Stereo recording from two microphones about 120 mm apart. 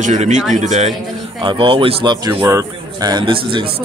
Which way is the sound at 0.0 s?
85° right.